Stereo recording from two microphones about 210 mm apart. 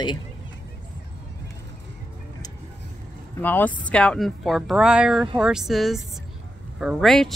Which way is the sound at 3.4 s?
10° left (ahead or behind).